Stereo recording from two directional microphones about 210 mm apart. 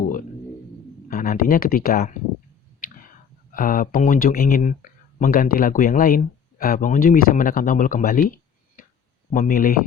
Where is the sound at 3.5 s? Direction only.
40° left (ahead or behind).